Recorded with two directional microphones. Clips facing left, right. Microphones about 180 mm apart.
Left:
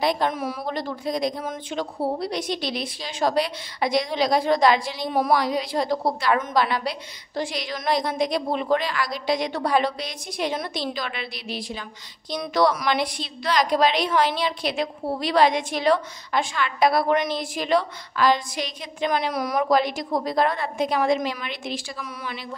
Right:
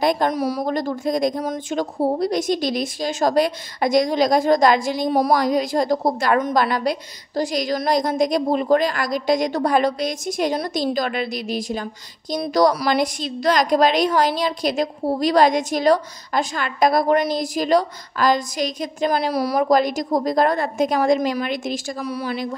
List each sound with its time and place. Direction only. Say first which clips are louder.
0.0 s speech: right 4 dB; 45° right (ahead or behind)